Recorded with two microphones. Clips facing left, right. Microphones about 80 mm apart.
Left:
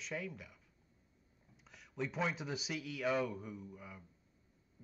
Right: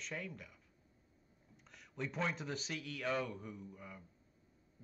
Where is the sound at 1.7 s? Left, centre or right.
Centre.